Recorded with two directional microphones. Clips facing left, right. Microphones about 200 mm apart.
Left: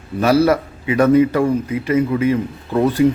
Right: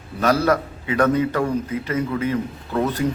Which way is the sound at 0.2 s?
10° left (ahead or behind).